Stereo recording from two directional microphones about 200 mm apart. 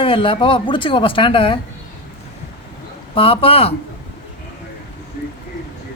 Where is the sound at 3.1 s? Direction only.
25° left (ahead or behind).